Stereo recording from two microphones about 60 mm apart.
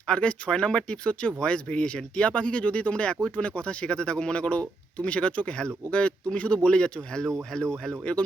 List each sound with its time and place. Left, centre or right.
0.1 s speech: centre